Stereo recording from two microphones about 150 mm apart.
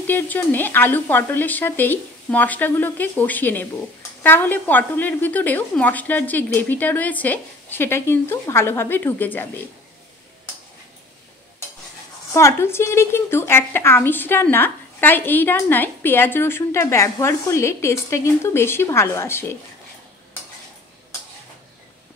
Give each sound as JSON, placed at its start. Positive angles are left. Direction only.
{"t": 0.0, "sound": "a woman's voice", "side_deg": 10}
{"t": 12.4, "sound": "a woman's voice", "side_deg": 15}